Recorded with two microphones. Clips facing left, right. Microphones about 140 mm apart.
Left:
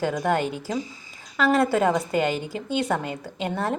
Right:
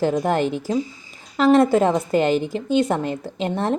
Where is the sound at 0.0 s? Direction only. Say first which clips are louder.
Right 4 dB; 30° right (ahead or behind).